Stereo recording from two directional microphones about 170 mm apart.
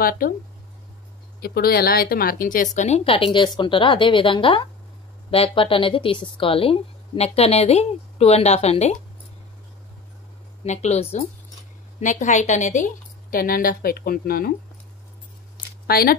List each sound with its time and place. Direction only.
1.4 s a woman's voice: 65° left (ahead or behind); by 8.9 s 40° left (ahead or behind)
10.6 s a woman's voice: 40° left (ahead or behind); by 14.5 s 60° left (ahead or behind)
15.9 s a woman's voice: 60° left (ahead or behind)